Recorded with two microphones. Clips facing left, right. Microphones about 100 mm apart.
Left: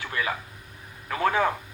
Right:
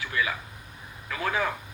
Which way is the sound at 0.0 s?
40° left (ahead or behind).